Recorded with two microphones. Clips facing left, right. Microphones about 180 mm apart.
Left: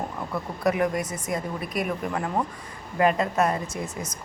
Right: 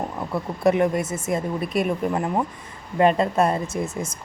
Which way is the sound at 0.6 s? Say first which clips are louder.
Right 5 dB; 25° right (ahead or behind).